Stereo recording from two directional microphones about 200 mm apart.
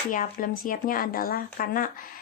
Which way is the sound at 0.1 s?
40° left (ahead or behind).